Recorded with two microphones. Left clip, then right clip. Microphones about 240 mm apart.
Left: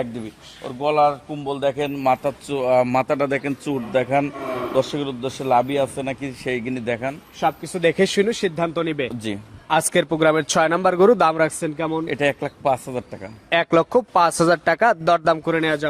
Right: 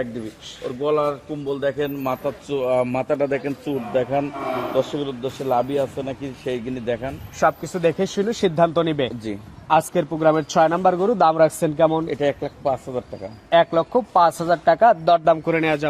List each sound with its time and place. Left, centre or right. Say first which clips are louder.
0.8 s a man's voice: left 3 dB; left
7.9 s speech: left 5 dB; left
8.4 s speech: right 4 dB; centre
9.9 s speech: left 1 dB; left
11.3 s speech: right 5 dB; centre
12.0 s speech: left 1 dB; left
13.5 s speech: even; left
15.4 s speech: even; centre